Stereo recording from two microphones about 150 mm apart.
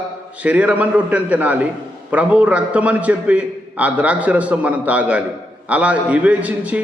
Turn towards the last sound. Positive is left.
turn(degrees=-10)  # may be behind; listen again after turning